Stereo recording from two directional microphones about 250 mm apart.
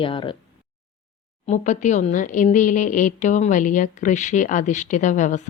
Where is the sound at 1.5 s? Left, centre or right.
Left.